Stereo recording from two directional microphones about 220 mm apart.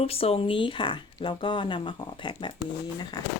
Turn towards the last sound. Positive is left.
turn(degrees=20)  # may be behind; listen again after turning